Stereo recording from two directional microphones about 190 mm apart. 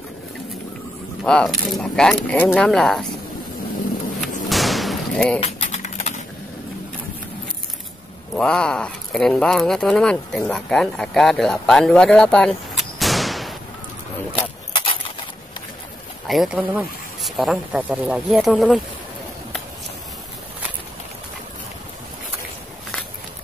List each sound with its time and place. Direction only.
1.2 s speech: 5° left (ahead or behind)
4.5 s slam: centre (ahead or behind)
5.6 s typing: 40° left (ahead or behind)
8.4 s speech: 5° left (ahead or behind)
14.8 s a sound: 25° left (ahead or behind)
16.3 s speech: centre (ahead or behind)